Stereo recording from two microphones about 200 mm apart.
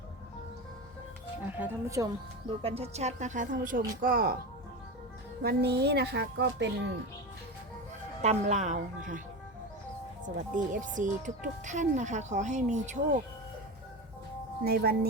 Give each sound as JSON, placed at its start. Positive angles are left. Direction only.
{"t": 1.5, "sound": "speech", "side_deg": -10}
{"t": 2.6, "sound": "a woman's voice", "side_deg": -30}
{"t": 5.4, "sound": "a woman's voice", "side_deg": -55}
{"t": 8.2, "sound": "a woman's voice", "side_deg": -35}
{"t": 10.2, "sound": "a woman's voice", "side_deg": -40}
{"t": 14.6, "sound": "speech", "side_deg": -50}